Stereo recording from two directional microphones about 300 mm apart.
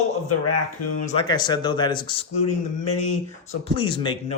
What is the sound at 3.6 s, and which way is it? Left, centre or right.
Speech, centre.